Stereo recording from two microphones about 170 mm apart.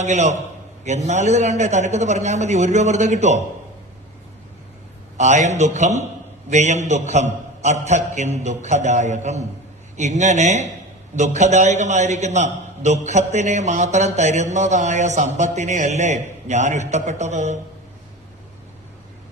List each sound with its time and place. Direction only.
0.0 s a man's voice: 45° right (ahead or behind)
5.1 s a man's voice: 45° right (ahead or behind)